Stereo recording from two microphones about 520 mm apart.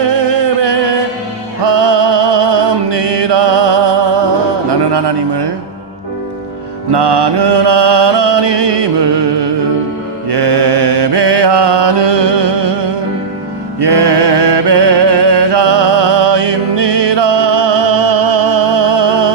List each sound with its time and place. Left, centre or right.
1.7 s music: right
4.7 s a sound: right
6.9 s mantra: right
10.2 s mantra: right
13.7 s music: right